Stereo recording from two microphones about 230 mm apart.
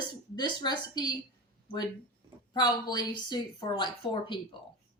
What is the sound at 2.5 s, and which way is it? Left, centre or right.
A woman's voice, centre.